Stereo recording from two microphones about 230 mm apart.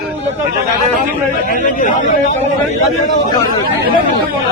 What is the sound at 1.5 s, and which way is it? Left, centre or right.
Speech, left.